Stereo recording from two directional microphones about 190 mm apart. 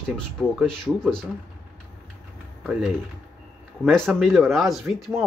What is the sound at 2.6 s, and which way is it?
Speech, centre (ahead or behind).